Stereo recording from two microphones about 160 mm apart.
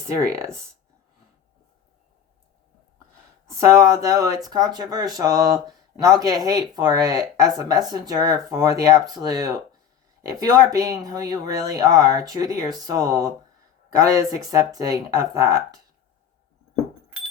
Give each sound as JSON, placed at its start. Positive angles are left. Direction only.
{"t": 0.2, "sound": "speech", "side_deg": -20}
{"t": 3.6, "sound": "speech", "side_deg": -20}